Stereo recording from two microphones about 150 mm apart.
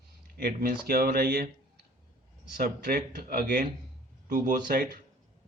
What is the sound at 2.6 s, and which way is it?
Speech, 80° right.